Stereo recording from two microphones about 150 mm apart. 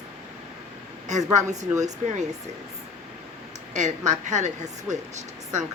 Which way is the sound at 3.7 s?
55° right (ahead or behind).